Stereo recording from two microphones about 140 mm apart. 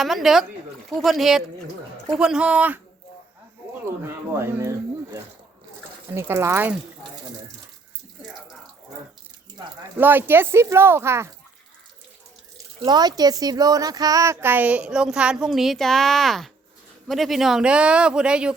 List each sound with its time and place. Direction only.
0.0 s speech: centre (ahead or behind)
4.4 s speech: 15° right (ahead or behind)
6.1 s speech: 20° right (ahead or behind)
10.0 s speech: 15° right (ahead or behind)
12.8 s speech: 30° right (ahead or behind); by 18.5 s 5° right (ahead or behind)